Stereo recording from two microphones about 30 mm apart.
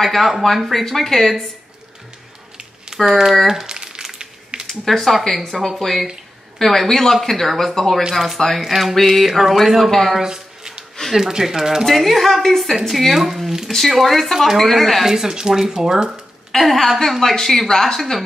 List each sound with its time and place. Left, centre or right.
0.0 s a woman's voice: centre
3.1 s speech: centre
3.6 s crumpling: right
4.0 s a sound: centre
4.6 s a woman's voice: centre
8.1 s a woman's voice: centre
10.2 s a sound: right
11.1 s speech: centre
11.8 s a woman's voice: centre
13.7 s a woman's voice: centre
15.0 s speech: centre
16.5 s a woman's voice: centre